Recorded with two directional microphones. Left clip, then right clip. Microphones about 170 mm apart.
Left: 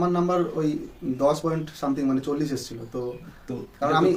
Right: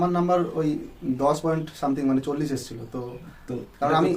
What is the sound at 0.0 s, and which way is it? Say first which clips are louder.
A man's voice: right 1 dB; 20° right (ahead or behind).